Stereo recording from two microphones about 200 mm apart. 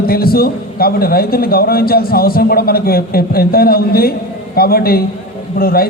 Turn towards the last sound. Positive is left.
turn(degrees=50)  # may be behind; listen again after turning